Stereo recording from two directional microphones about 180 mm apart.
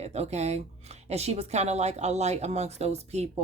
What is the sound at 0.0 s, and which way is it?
Speech, 35° right (ahead or behind).